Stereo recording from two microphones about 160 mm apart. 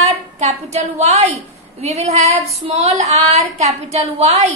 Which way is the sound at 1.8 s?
45° right (ahead or behind).